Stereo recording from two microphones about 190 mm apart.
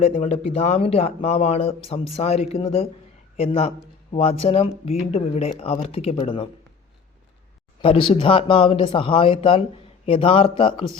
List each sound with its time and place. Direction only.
0.0 s speech: 30° left (ahead or behind)
7.8 s speech: 30° left (ahead or behind)